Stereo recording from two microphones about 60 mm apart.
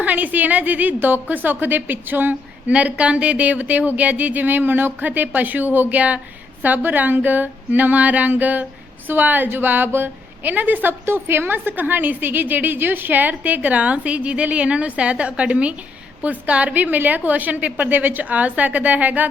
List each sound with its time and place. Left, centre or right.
0.0 s a woman's voice: right
2.7 s a woman's voice: right